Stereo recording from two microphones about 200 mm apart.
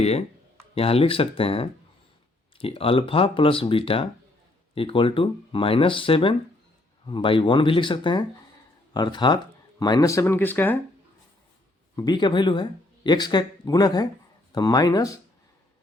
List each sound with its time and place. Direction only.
0.0 s speech: 30° left (ahead or behind); by 10.8 s 10° left (ahead or behind)
11.9 s speech: 20° left (ahead or behind)